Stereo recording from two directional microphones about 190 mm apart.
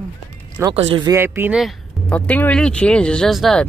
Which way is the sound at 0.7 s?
30° right (ahead or behind).